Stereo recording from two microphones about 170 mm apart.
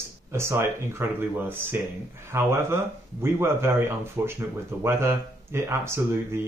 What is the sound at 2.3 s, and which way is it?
Speech, 15° right (ahead or behind).